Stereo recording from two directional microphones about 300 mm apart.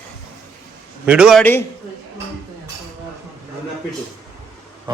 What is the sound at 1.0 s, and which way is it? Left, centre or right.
Speech, centre.